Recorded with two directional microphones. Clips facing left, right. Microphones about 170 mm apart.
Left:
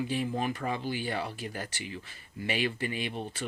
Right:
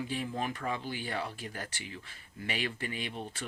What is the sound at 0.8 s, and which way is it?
Speech, 5° left (ahead or behind).